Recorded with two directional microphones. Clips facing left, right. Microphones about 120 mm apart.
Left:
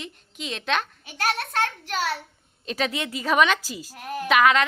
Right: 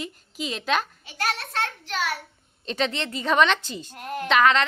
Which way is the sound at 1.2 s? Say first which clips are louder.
Left 2 dB; 50° left (ahead or behind).